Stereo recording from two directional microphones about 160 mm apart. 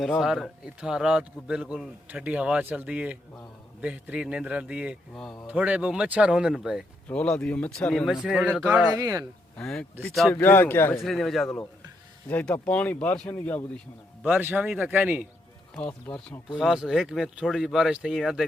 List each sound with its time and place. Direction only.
0.0 s speech: centre (ahead or behind)
5.5 s speech: 10° right (ahead or behind)
9.0 s speech: 20° right (ahead or behind)
9.6 s speech: 5° left (ahead or behind)
11.0 s speech: centre (ahead or behind)
14.2 s speech: 10° right (ahead or behind)
15.8 s speech: 10° left (ahead or behind)
16.6 s speech: 5° right (ahead or behind)